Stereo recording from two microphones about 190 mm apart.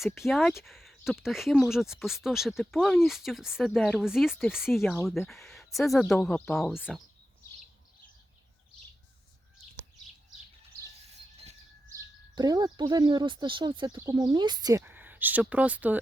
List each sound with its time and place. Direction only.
0.0 s speech: centre (ahead or behind)
11.9 s speech: 20° right (ahead or behind)